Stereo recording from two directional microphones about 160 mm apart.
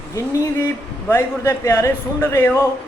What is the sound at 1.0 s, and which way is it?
A man's voice, 15° left (ahead or behind).